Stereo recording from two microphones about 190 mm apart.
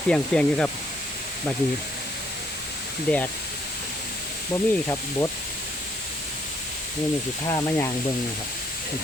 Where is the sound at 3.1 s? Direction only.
5° left (ahead or behind).